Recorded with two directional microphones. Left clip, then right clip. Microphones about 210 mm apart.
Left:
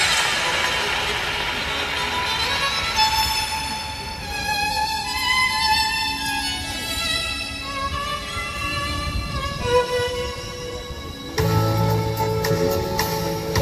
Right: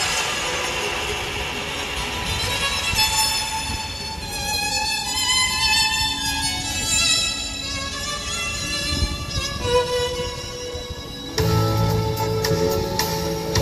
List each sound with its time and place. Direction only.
1.8 s music: 15° left (ahead or behind)
4.6 s music: 25° left (ahead or behind)
9.7 s music: 30° left (ahead or behind)
11.3 s music: 35° left (ahead or behind)